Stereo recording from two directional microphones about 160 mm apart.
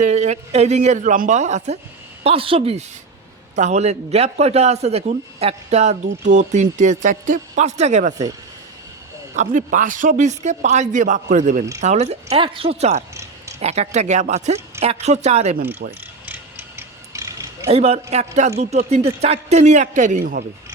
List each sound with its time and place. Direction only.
0.0 s a man's voice: 45° right (ahead or behind)
2.2 s a man's voice: 35° right (ahead or behind)
9.3 s a man's voice: 50° right (ahead or behind)
15.8 s speech: 90° right
16.2 s mechanisms: 15° right (ahead or behind)
17.7 s a man's voice: 40° right (ahead or behind)
20.1 s speech: 65° right (ahead or behind)